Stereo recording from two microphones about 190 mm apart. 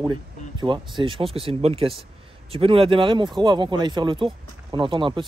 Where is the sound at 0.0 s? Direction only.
25° right (ahead or behind).